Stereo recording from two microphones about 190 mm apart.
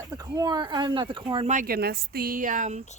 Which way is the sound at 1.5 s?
50° right (ahead or behind).